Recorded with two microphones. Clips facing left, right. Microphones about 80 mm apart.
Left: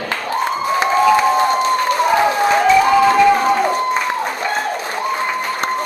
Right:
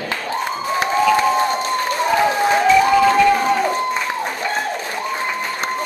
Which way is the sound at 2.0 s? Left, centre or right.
Left.